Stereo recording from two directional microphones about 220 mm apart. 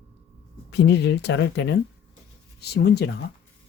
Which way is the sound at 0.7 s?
50° left (ahead or behind).